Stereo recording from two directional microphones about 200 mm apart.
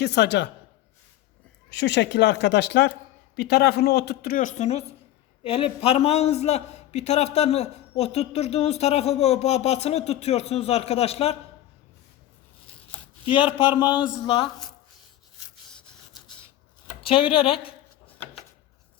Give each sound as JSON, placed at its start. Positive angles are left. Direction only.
{"t": 0.0, "sound": "speech", "side_deg": 55}
{"t": 1.7, "sound": "a man's voice", "side_deg": 60}
{"t": 13.2, "sound": "a man's voice", "side_deg": 25}
{"t": 17.0, "sound": "speech", "side_deg": 25}